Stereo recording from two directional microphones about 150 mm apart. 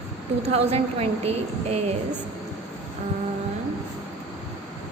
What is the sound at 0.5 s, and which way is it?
A woman's voice, 45° right (ahead or behind).